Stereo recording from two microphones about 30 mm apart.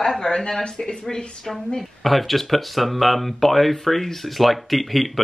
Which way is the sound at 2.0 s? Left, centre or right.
Centre.